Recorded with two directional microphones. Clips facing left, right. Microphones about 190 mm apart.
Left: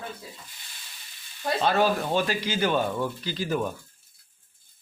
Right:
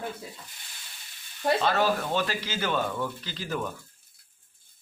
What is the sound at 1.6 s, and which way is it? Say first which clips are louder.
Speech: left 2 dB; 15° left (ahead or behind).